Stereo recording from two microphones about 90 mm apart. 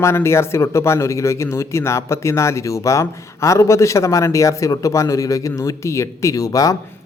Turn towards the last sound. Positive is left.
turn(degrees=40)  # may be behind; listen again after turning